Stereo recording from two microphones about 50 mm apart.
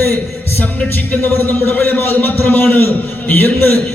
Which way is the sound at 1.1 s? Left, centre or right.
Left.